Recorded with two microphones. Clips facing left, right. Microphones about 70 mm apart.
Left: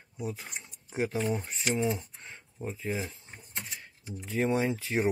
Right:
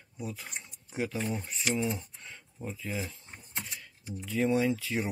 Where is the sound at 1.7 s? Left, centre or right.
Left.